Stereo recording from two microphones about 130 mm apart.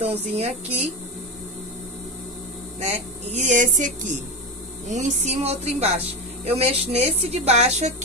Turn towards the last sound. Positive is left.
turn(degrees=-60)  # may be behind; listen again after turning